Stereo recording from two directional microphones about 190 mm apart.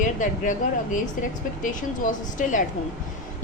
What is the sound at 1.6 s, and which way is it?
A woman's voice, 45° left (ahead or behind).